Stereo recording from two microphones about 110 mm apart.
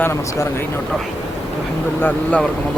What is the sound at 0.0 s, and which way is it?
Speech, 25° left (ahead or behind).